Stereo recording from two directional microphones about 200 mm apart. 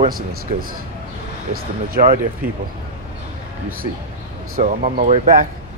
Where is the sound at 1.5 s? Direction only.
45° right (ahead or behind).